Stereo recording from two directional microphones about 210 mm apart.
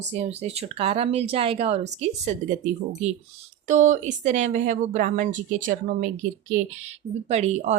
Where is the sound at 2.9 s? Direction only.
30° right (ahead or behind).